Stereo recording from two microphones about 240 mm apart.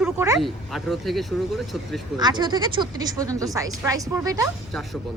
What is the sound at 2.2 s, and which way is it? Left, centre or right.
A woman's voice, centre.